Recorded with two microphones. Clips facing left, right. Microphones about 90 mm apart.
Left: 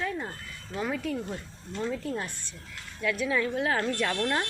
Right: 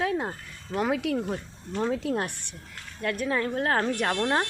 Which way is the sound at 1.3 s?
60° right (ahead or behind).